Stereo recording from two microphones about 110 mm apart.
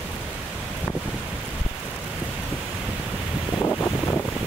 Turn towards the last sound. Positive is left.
turn(degrees=15)  # may be behind; listen again after turning